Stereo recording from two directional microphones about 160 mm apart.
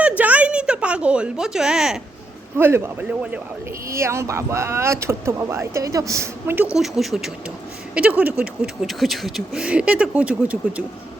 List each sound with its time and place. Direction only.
0.2 s a sound: 10° right (ahead or behind)
2.6 s speech: 15° right (ahead or behind)
6.7 s speech: centre (ahead or behind)